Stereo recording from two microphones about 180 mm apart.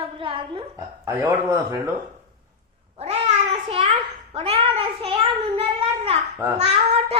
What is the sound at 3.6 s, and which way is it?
A child's voice, 40° right (ahead or behind).